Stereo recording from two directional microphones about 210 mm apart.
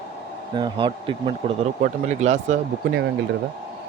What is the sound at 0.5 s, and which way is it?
Speech, 20° right (ahead or behind).